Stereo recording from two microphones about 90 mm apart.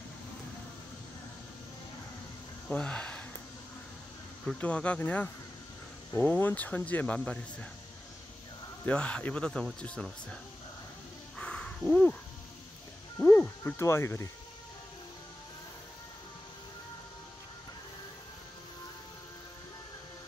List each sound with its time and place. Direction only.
2.7 s speech: 10° left (ahead or behind)
4.6 s speech: 15° left (ahead or behind)
8.8 s speech: 15° left (ahead or behind)
11.3 s a sound: 10° left (ahead or behind)
13.2 s speech: 10° left (ahead or behind)
13.7 s speech: 30° left (ahead or behind)